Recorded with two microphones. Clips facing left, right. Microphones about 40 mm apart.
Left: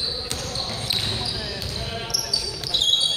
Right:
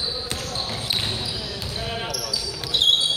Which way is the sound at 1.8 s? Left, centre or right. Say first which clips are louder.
Right 4 dB; centre.